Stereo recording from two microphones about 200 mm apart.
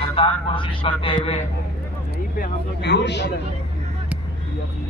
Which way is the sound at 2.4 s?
55° left (ahead or behind).